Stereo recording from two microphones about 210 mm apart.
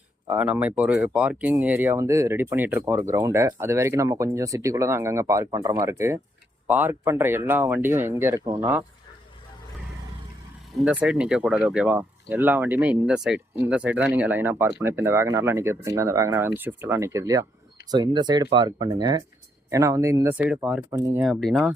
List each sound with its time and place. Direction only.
0.3 s speech: 5° right (ahead or behind)
10.8 s speech: 5° right (ahead or behind)